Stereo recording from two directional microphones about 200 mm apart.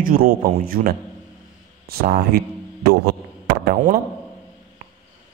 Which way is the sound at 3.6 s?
45° right (ahead or behind).